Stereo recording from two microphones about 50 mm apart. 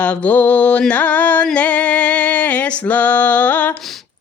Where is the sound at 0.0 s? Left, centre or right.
Left.